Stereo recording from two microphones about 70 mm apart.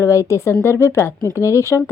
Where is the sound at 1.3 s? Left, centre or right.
Right.